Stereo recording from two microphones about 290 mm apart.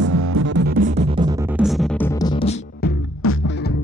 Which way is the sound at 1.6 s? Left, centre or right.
Centre.